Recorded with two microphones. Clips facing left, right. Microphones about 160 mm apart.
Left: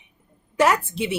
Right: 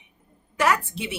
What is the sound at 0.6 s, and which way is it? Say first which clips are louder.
Speech: left 3 dB; 25° left (ahead or behind).